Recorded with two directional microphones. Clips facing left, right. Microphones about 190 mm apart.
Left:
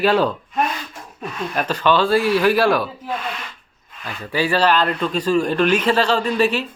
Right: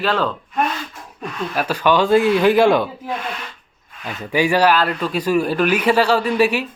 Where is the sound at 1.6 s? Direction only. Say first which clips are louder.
Right 1 dB; 10° right (ahead or behind).